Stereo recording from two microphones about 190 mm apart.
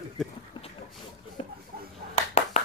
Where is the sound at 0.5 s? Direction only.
25° left (ahead or behind).